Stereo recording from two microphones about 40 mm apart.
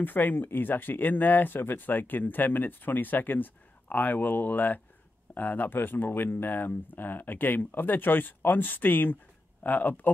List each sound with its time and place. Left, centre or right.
0.0 s speech: left